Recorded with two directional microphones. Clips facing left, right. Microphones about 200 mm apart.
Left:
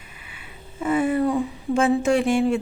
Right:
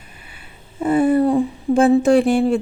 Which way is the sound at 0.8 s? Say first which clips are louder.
Right 6 dB; 35° right (ahead or behind).